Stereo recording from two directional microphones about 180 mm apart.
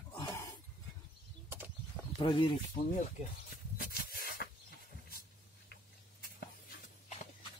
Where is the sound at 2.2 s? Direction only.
30° left (ahead or behind).